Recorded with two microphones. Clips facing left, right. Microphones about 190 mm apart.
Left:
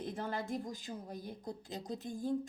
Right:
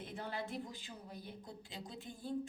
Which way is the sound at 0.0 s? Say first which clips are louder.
Left 4 dB; 45° left (ahead or behind).